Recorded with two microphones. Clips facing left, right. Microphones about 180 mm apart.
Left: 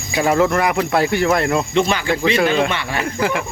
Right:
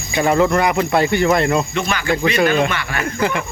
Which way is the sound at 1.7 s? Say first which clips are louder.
Left 2 dB; 25° left (ahead or behind).